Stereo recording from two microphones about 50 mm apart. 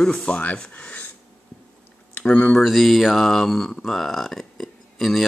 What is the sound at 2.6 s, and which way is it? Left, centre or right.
Speech, centre.